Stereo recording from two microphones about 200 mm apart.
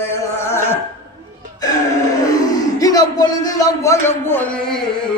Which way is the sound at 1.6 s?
20° left (ahead or behind).